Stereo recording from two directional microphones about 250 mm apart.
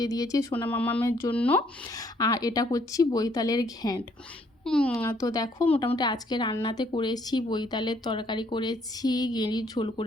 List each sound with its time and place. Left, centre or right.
0.0 s speech: centre
4.6 s speech: centre